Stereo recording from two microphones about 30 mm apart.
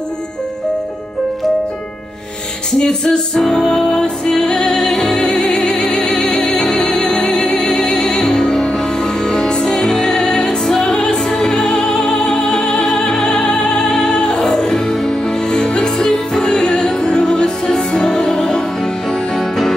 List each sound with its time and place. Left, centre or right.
2.8 s music: left
3.3 s music: centre
3.8 s music: left
4.3 s music: centre
5.9 s music: centre
8.6 s music: left
9.8 s music: centre
11.6 s music: centre
12.9 s music: centre
15.2 s music: left
16.0 s music: centre
17.2 s music: left; by 19.7 s centre